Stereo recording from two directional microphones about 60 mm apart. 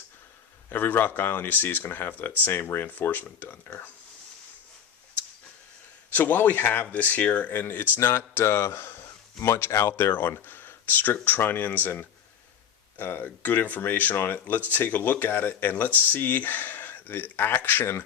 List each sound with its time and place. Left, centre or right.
0.7 s speech: left
6.1 s a man's voice: left
10.1 s speech: left